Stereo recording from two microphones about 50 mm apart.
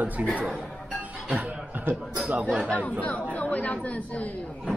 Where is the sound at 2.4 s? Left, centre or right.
Centre.